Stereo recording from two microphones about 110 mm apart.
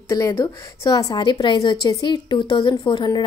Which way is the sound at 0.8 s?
40° left (ahead or behind).